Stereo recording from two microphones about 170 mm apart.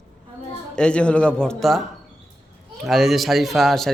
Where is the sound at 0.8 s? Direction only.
5° left (ahead or behind).